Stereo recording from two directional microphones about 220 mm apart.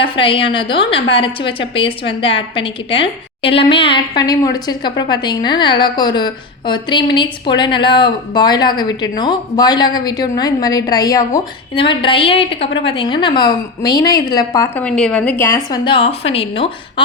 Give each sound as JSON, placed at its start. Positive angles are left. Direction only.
{"t": 0.0, "sound": "a woman's voice", "side_deg": 25}